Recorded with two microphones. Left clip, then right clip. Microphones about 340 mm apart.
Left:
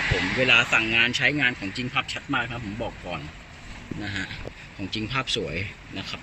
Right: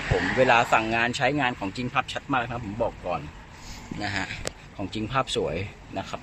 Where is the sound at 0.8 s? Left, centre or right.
Right.